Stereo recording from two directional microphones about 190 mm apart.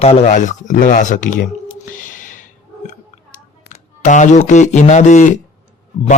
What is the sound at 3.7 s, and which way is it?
Speech, 40° left (ahead or behind).